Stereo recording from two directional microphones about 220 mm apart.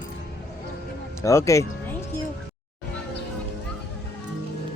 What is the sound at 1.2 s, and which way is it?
Speech, 15° left (ahead or behind).